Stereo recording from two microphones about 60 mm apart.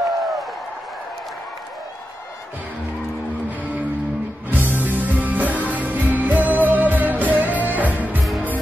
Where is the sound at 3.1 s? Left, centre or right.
Left.